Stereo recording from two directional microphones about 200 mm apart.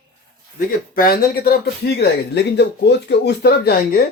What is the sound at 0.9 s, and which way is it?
Speech, 45° left (ahead or behind).